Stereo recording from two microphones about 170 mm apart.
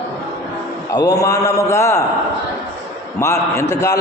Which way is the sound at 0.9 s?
20° left (ahead or behind).